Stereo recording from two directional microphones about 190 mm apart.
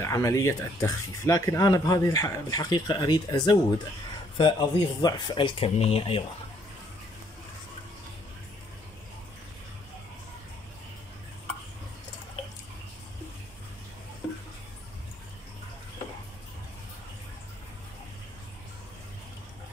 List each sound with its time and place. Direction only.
0.0 s speech: 15° left (ahead or behind)